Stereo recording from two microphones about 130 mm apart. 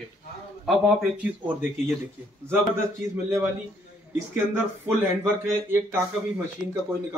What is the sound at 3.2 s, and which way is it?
Speech, 20° right (ahead or behind).